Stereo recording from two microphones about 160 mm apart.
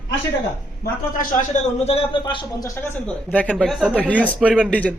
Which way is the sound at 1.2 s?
50° left (ahead or behind).